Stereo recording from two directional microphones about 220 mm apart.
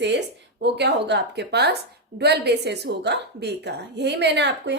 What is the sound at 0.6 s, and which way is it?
A woman's voice, 50° right (ahead or behind).